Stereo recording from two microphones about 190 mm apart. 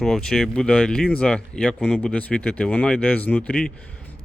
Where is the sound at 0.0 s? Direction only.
5° left (ahead or behind).